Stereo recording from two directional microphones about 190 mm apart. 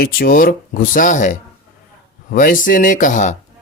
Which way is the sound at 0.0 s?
50° left (ahead or behind).